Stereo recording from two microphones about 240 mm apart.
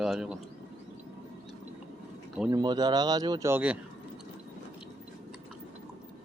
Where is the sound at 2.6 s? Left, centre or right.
Centre.